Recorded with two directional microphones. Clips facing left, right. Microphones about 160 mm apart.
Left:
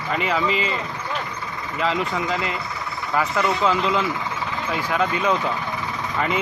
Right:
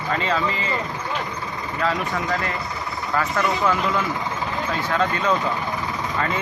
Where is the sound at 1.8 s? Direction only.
20° left (ahead or behind).